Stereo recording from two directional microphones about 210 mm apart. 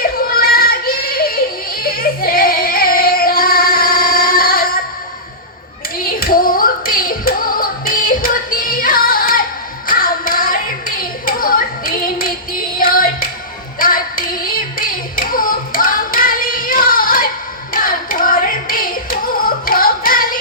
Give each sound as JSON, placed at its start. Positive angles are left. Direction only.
{"t": 0.3, "sound": "child singing", "side_deg": 45}
{"t": 6.0, "sound": "music", "side_deg": 45}
{"t": 9.8, "sound": "hands", "side_deg": 40}
{"t": 12.8, "sound": "music", "side_deg": 40}
{"t": 13.7, "sound": "carnatic music", "side_deg": 40}
{"t": 17.7, "sound": "hands", "side_deg": 40}